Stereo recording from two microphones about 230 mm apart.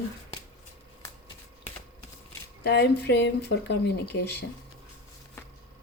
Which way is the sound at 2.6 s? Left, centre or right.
Left.